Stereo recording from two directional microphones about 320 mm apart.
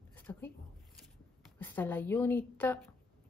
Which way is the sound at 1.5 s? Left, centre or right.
Centre.